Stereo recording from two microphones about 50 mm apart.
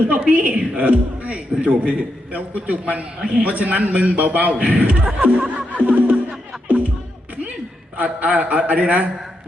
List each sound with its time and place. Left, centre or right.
0.1 s a man's voice: right
7.9 s a man's voice: right